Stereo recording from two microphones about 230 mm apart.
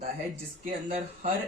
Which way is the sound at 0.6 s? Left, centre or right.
Right.